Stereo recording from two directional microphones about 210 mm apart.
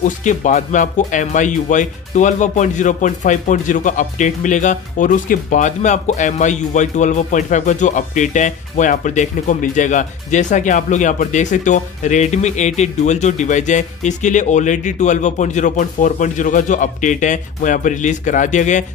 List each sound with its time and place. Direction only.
0.0 s speech: 35° left (ahead or behind)